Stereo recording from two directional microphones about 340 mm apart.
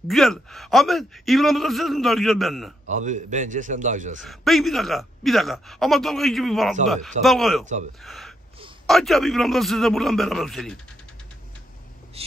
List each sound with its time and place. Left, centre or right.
0.1 s a man's voice: centre
2.9 s a man's voice: right
4.2 s a man's voice: centre
7.6 s a man's voice: right
8.0 s a man's voice: centre
12.2 s a sound: centre